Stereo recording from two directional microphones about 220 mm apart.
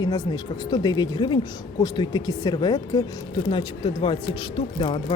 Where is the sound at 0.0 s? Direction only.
20° left (ahead or behind).